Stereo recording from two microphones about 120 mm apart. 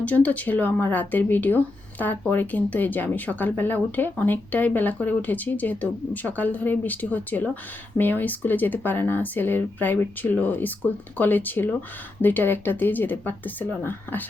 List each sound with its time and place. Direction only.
0.0 s speech: 10° left (ahead or behind)